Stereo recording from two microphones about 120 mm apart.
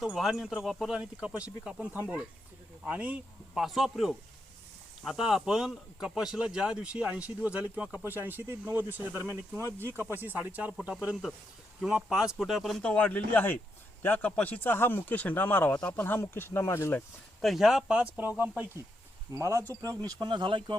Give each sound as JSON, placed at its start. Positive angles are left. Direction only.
{"t": 0.0, "sound": "speech", "side_deg": 0}
{"t": 17.4, "sound": "speech", "side_deg": 0}
{"t": 19.3, "sound": "speech", "side_deg": -25}
{"t": 20.1, "sound": "speech", "side_deg": -40}